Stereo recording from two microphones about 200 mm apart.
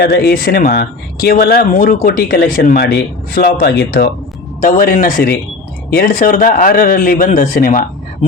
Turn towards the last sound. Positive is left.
turn(degrees=45)  # may be behind; listen again after turning